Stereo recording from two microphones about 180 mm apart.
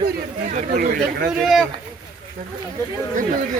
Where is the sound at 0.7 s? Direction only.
55° right (ahead or behind).